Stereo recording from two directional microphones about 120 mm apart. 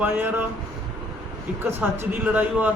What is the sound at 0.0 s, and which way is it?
Speech, 15° right (ahead or behind).